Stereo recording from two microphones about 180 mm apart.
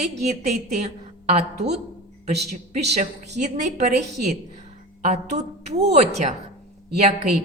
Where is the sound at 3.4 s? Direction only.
40° right (ahead or behind).